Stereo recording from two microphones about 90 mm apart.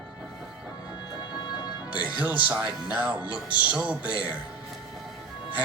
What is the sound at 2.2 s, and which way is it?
Speech, 20° right (ahead or behind).